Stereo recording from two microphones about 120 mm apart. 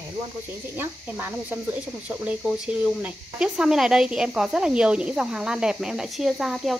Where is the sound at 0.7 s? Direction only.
20° right (ahead or behind).